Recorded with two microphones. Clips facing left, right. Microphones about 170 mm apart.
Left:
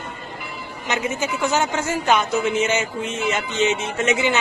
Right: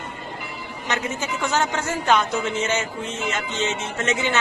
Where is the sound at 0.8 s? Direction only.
10° left (ahead or behind).